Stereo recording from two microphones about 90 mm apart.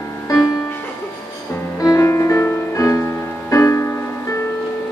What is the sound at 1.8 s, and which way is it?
Music, 35° left (ahead or behind).